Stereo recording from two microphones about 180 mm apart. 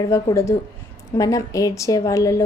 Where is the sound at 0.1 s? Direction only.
15° left (ahead or behind).